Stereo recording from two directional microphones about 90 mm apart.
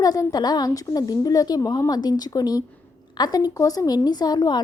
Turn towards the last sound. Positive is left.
turn(degrees=50)  # may be behind; listen again after turning